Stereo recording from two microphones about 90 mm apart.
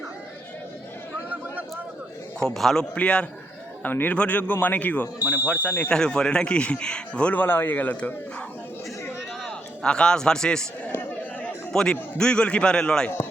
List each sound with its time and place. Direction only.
2.4 s a man's voice: 5° left (ahead or behind)
9.5 s a man's voice: 10° left (ahead or behind)
10.8 s chatter: 20° left (ahead or behind)
11.7 s a man's voice: 10° left (ahead or behind)